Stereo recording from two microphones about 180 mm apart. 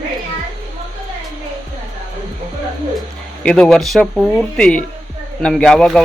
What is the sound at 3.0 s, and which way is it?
Speech, 5° left (ahead or behind).